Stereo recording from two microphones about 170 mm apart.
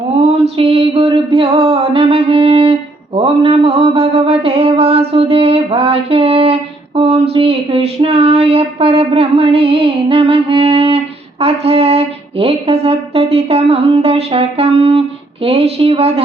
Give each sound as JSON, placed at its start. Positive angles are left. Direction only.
{"t": 0.5, "sound": "music", "side_deg": -35}
{"t": 3.2, "sound": "mantra", "side_deg": -35}
{"t": 15.4, "sound": "speech", "side_deg": -35}